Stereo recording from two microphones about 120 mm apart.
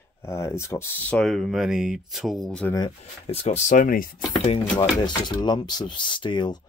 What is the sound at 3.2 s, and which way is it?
Speech, 60° left (ahead or behind).